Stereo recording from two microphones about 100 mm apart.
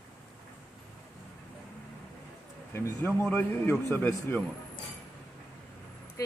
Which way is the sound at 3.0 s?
20° left (ahead or behind).